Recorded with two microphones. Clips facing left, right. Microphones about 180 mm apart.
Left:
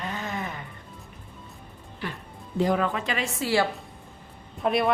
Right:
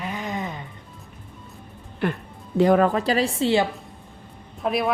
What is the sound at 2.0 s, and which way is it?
Music, 65° right (ahead or behind).